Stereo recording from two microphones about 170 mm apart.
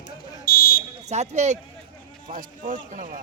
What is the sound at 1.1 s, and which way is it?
Speech, 40° right (ahead or behind).